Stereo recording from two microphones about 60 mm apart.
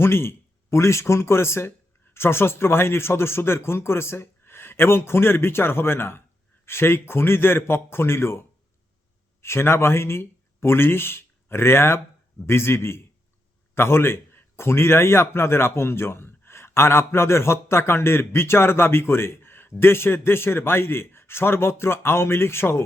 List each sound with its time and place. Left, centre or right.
0.0 s a man's voice: left